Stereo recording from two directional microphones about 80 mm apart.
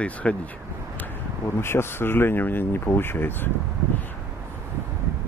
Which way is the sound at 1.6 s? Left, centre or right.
Left.